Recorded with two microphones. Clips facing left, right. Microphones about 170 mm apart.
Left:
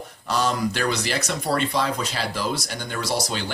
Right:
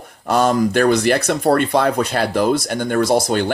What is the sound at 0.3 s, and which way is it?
Speech, 55° right (ahead or behind).